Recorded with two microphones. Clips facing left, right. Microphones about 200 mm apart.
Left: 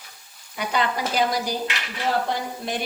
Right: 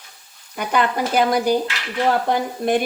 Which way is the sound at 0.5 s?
50° right (ahead or behind).